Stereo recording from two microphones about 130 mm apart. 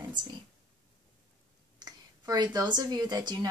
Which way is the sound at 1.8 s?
30° right (ahead or behind).